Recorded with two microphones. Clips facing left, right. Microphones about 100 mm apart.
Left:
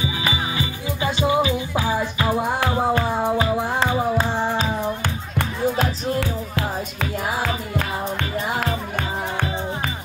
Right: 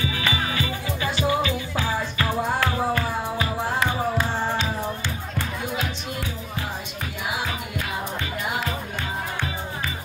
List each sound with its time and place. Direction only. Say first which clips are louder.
0.0 s music: left 1 dB; 20° left (ahead or behind)
5.0 s music: left 4 dB; 65° left (ahead or behind); by 7.5 s 85° left